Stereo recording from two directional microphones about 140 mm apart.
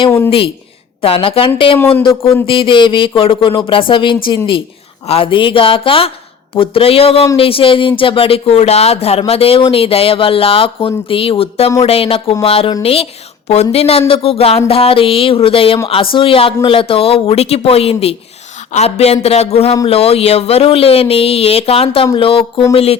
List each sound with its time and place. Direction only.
0.3 s speech: 40° left (ahead or behind)
1.8 s speech: 10° left (ahead or behind)
2.5 s speech: 35° left (ahead or behind)